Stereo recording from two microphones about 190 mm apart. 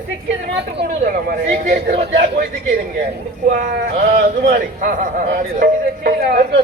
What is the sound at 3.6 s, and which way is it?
Speech, 45° right (ahead or behind).